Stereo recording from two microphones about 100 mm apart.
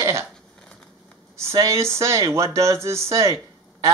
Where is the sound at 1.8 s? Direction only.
30° right (ahead or behind).